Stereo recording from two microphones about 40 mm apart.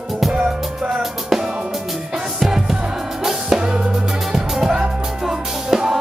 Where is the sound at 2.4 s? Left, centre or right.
Centre.